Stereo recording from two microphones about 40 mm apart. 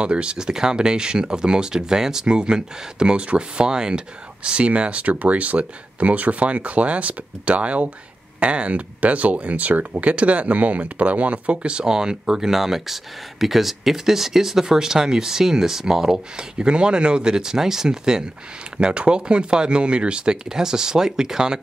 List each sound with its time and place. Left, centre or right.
0.0 s speech: right
4.4 s speech: right
11.6 s speech: right